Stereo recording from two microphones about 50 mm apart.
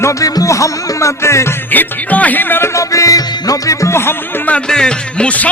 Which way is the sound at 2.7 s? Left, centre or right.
Left.